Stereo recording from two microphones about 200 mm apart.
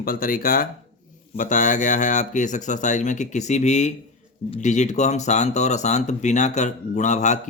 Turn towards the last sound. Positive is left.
turn(degrees=35)  # may be behind; listen again after turning